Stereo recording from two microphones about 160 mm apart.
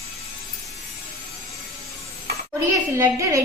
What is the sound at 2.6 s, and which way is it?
Speech, 15° right (ahead or behind).